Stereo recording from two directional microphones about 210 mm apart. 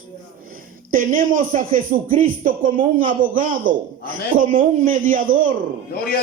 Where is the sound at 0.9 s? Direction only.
40° right (ahead or behind).